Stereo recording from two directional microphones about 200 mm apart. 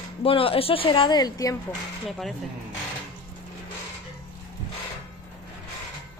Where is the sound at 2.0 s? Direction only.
Centre (ahead or behind).